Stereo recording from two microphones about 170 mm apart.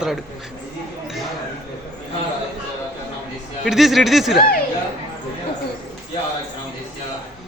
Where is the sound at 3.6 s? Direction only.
Centre (ahead or behind).